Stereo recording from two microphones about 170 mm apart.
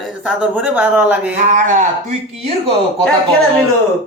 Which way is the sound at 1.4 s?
50° right (ahead or behind).